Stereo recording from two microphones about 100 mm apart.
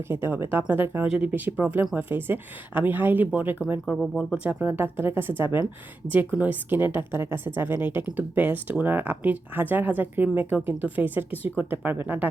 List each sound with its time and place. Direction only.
0.1 s speech: 20° right (ahead or behind)
3.8 s speech: centre (ahead or behind)
4.6 s speech: 20° right (ahead or behind)